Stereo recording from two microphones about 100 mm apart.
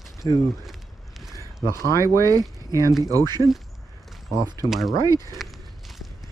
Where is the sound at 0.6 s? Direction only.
Centre (ahead or behind).